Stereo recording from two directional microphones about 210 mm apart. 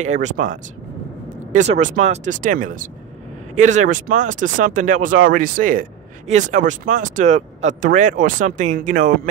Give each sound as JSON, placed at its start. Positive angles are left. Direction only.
{"t": 0.0, "sound": "speech", "side_deg": -35}